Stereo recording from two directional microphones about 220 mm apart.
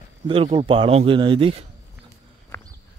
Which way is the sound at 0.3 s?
25° right (ahead or behind).